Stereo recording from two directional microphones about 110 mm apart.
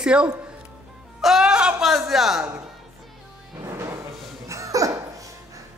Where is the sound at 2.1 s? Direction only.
Centre (ahead or behind).